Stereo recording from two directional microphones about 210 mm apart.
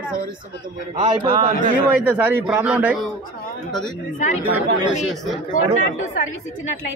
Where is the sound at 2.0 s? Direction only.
5° right (ahead or behind).